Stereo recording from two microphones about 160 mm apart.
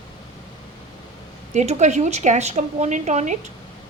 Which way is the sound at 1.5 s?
45° right (ahead or behind).